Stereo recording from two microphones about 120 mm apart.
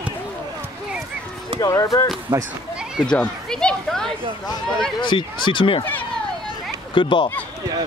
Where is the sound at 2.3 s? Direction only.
40° right (ahead or behind).